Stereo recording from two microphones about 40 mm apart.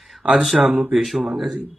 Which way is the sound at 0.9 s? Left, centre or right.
Centre.